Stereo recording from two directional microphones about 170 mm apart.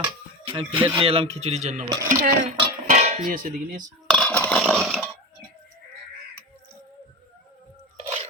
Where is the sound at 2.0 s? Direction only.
50° right (ahead or behind).